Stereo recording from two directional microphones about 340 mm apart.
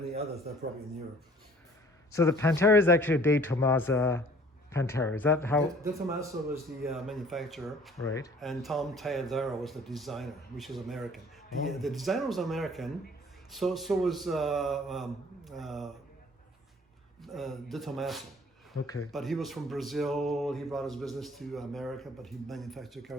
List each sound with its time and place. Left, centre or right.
0.1 s a man's voice: centre
2.1 s a man's voice: centre
5.8 s speech: centre
17.2 s speech: centre